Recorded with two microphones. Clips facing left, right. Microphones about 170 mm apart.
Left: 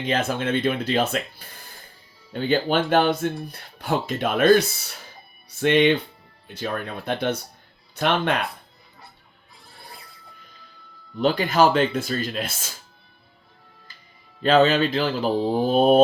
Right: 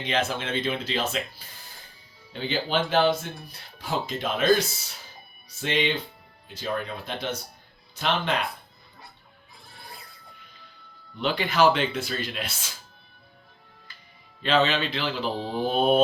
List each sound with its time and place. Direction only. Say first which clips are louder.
0.0 s speech: left 4 dB; 50° left (ahead or behind)
11.2 s speech: left 4 dB; 45° left (ahead or behind)
14.4 s speech: left 6 dB; 45° left (ahead or behind)